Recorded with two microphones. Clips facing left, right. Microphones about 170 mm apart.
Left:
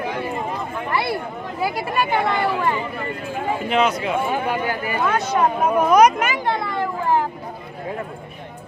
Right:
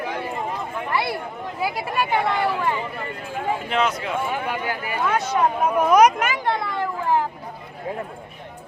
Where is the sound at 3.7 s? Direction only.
15° left (ahead or behind).